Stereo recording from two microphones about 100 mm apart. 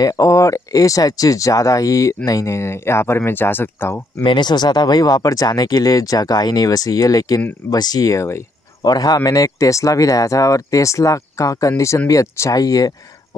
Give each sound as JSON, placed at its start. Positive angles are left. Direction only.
{"t": 0.0, "sound": "speech", "side_deg": 35}
{"t": 4.2, "sound": "speech", "side_deg": 50}